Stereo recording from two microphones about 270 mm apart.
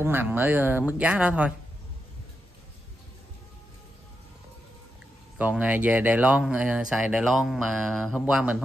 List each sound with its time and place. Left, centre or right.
0.0 s speech: centre
5.4 s speech: centre